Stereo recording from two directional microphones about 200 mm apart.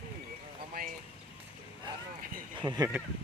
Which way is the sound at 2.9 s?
10° right (ahead or behind).